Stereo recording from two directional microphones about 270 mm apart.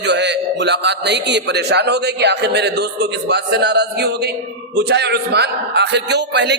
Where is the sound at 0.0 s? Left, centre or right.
Right.